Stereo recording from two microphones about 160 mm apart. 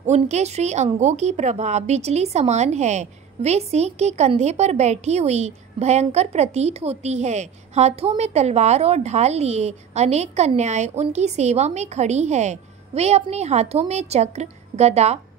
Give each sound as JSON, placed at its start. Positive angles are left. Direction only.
{"t": 0.0, "sound": "a woman's voice", "side_deg": -45}